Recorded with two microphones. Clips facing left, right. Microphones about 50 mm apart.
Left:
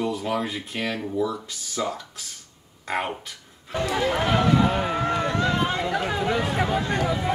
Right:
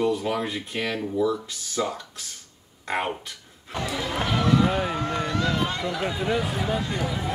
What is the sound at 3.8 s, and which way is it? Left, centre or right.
Speech, left.